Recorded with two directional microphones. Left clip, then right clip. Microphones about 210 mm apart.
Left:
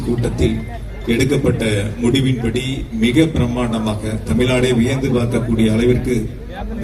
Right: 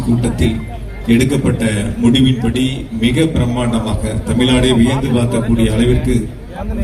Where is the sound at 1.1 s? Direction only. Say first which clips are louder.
Right 2 dB; 25° left (ahead or behind).